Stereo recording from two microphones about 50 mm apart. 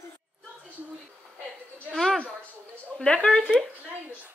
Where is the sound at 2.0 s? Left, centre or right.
Centre.